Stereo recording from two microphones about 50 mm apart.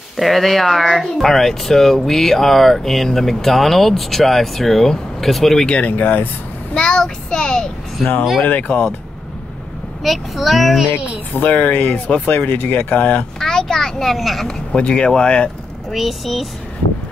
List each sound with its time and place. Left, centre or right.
0.2 s speech: centre
5.7 s speech: left
6.7 s child singing: centre
8.4 s speech: left
10.0 s speech: centre
11.3 s speech: left
13.4 s a child's voice: centre
14.7 s speech: centre
15.9 s speech: centre